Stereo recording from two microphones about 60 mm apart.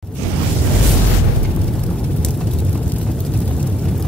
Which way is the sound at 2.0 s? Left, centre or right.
Centre.